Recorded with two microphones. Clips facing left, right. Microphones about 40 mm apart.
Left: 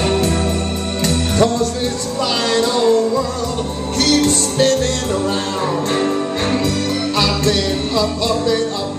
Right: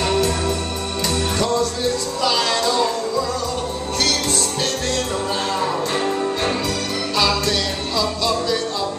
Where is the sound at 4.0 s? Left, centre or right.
Left.